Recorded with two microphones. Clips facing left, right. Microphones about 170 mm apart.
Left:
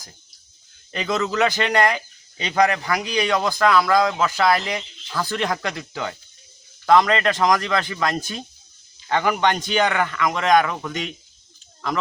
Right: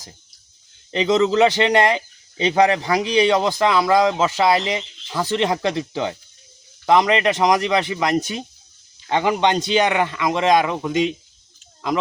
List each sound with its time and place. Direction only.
0.9 s speech: 20° right (ahead or behind)